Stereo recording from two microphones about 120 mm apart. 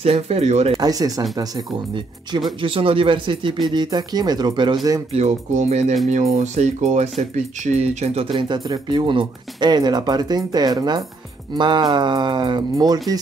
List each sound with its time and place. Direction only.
0.0 s speech: 60° right (ahead or behind)
0.7 s speech: 30° right (ahead or behind)
2.6 s speech: 50° right (ahead or behind)
5.1 s music: 75° right (ahead or behind)
6.0 s speech: 75° right (ahead or behind); by 13.0 s 35° right (ahead or behind)